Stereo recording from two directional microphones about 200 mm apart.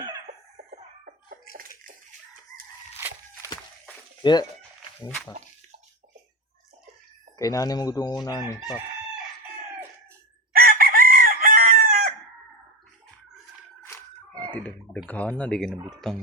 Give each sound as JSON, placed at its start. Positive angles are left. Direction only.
{"t": 0.3, "sound": "chicken", "side_deg": -40}
{"t": 3.0, "sound": "a sound", "side_deg": -10}
{"t": 4.2, "sound": "speech", "side_deg": 20}
{"t": 5.0, "sound": "speech", "side_deg": 5}
{"t": 7.3, "sound": "chicken", "side_deg": 15}
{"t": 10.5, "sound": "chicken", "side_deg": -45}
{"t": 13.8, "sound": "a sound", "side_deg": 10}
{"t": 14.5, "sound": "speech", "side_deg": 10}